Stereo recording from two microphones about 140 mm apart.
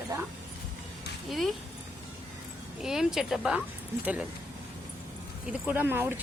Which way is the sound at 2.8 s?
5° right (ahead or behind).